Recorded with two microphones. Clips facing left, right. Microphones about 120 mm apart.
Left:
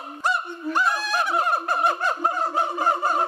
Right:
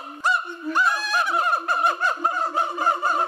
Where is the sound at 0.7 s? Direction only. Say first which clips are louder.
Right 1 dB; 60° left (ahead or behind).